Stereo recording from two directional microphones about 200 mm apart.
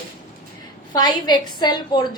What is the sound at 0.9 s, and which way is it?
A woman's voice, 20° left (ahead or behind).